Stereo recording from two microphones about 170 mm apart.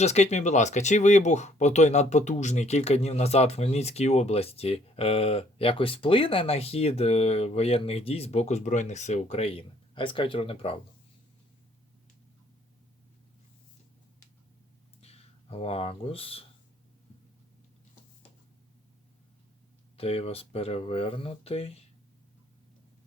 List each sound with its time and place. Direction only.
0.0 s speech: 40° left (ahead or behind)
15.0 s speech: 35° left (ahead or behind)
20.0 s speech: 35° left (ahead or behind)